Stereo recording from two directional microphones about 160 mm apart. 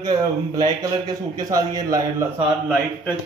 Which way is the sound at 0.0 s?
25° right (ahead or behind).